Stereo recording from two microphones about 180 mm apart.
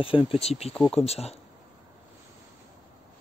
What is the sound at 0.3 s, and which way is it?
Speech, 35° left (ahead or behind).